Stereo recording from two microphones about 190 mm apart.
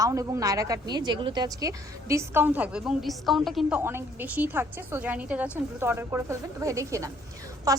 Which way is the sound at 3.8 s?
10° right (ahead or behind).